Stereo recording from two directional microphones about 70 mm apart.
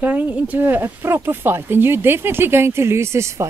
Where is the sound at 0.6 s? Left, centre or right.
Right.